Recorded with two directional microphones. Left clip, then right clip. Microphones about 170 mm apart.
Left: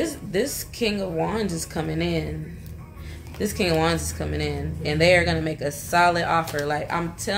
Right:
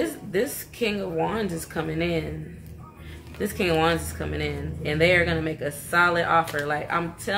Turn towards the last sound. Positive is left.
turn(degrees=10)  # may be behind; listen again after turning